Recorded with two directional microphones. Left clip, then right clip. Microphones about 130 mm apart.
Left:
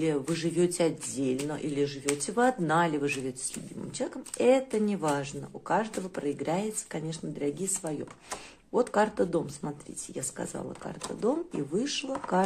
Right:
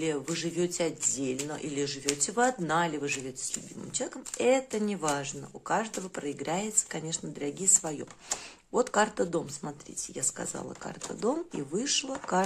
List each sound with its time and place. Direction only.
0.0 s speech: 10° right (ahead or behind)
1.2 s speech: 15° right (ahead or behind)
4.0 s speech: 15° right (ahead or behind)